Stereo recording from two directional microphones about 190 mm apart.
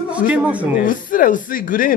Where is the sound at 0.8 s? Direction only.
45° left (ahead or behind).